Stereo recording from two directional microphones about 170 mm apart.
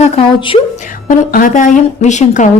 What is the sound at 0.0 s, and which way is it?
Speech, 35° left (ahead or behind).